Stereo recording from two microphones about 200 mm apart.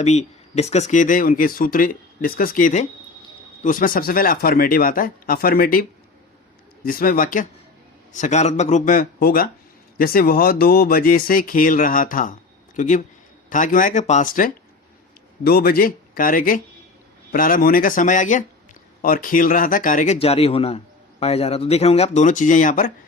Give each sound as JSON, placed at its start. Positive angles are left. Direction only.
{"t": 0.0, "sound": "speech", "side_deg": 35}
{"t": 6.8, "sound": "speech", "side_deg": 45}